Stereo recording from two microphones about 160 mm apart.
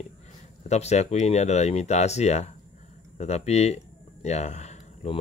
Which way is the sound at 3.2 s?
45° left (ahead or behind).